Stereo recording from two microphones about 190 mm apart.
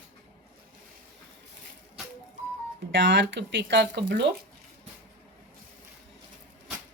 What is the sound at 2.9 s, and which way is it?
Speech, 70° right (ahead or behind).